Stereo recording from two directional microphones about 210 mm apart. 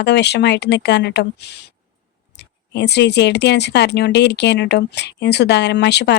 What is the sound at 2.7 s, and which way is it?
Speech, 55° left (ahead or behind).